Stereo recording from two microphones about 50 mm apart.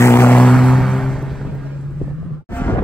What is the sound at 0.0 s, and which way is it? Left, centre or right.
Vehicle, left.